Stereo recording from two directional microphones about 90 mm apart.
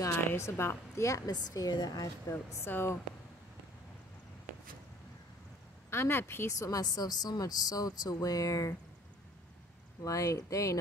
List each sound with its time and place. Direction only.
0.1 s a woman's voice: 25° left (ahead or behind); by 2.3 s 45° left (ahead or behind)
2.3 s speech: 25° left (ahead or behind)
5.9 s a woman's voice: 25° left (ahead or behind)
10.0 s a woman's voice: 35° left (ahead or behind)